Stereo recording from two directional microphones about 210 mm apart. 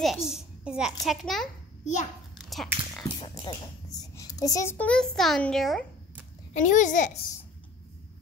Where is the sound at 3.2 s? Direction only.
20° left (ahead or behind); by 6.2 s centre (ahead or behind).